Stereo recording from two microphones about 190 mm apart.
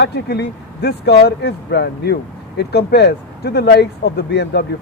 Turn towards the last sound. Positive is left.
turn(degrees=60)  # may be behind; listen again after turning